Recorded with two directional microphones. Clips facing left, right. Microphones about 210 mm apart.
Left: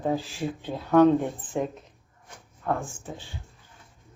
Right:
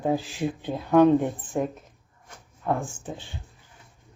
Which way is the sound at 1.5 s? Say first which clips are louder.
Right 1 dB; centre (ahead or behind).